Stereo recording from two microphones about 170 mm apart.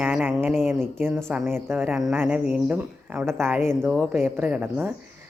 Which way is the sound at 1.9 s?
5° right (ahead or behind).